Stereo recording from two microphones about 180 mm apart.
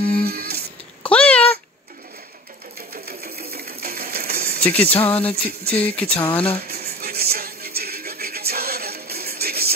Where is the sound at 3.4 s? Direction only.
60° right (ahead or behind).